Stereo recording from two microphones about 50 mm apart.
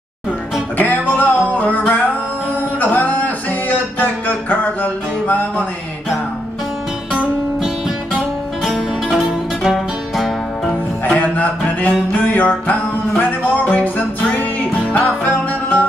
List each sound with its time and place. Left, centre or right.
0.7 s music: left
9.1 s music: centre
10.6 s music: centre
11.1 s music: left